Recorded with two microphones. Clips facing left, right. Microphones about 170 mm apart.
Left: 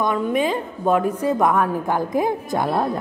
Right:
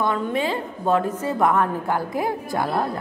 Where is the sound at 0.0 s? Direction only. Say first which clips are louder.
Left 3 dB; 15° left (ahead or behind).